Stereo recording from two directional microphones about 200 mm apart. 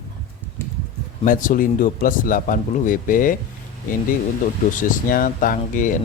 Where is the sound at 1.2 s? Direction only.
40° left (ahead or behind).